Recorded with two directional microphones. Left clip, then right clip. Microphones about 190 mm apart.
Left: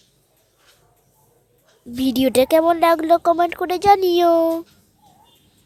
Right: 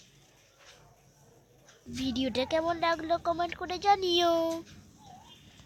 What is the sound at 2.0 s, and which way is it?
Speech, 65° left (ahead or behind).